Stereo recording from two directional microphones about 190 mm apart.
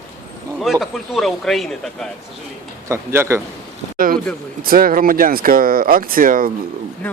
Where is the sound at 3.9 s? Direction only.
45° right (ahead or behind).